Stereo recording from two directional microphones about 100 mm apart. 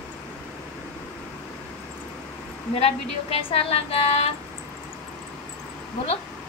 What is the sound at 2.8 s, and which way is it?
A woman's voice, 75° left (ahead or behind).